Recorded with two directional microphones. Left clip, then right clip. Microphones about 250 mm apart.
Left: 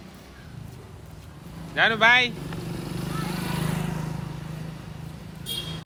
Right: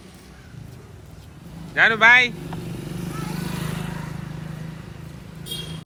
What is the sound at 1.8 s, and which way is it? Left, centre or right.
Speech, centre.